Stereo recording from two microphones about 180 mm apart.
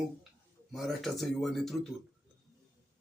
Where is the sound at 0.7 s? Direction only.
Centre (ahead or behind).